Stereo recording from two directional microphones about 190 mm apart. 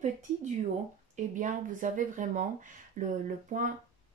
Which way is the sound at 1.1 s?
40° right (ahead or behind).